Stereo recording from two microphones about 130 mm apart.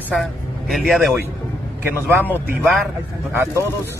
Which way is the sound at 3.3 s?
20° right (ahead or behind).